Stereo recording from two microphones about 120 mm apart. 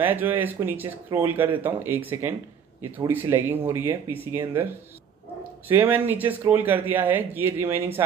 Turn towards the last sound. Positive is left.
turn(degrees=-15)  # may be behind; listen again after turning